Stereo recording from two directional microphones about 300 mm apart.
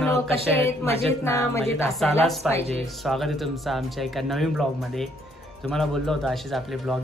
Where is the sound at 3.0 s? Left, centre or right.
Centre.